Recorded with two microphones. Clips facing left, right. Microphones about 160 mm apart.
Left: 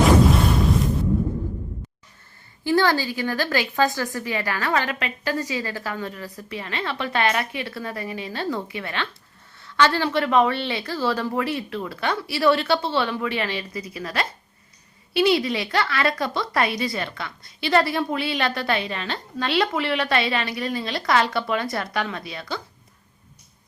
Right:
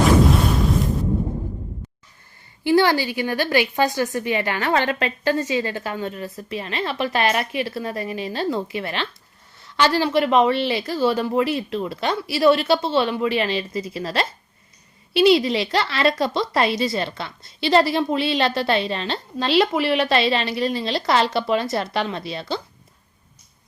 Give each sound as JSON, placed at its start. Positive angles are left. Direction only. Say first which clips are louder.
{"t": 2.6, "sound": "a woman's voice", "louder": "right 3 dB", "side_deg": -15}